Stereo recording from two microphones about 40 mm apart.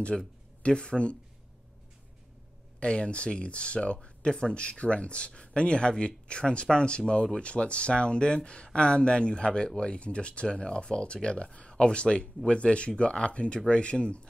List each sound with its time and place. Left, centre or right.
0.1 s speech: centre
0.6 s speech: left
2.8 s speech: left